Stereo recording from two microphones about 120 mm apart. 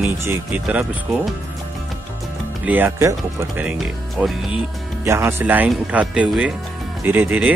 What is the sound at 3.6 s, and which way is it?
Speech, 15° right (ahead or behind).